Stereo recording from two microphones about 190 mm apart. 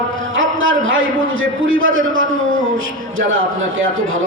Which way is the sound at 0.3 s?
90° right.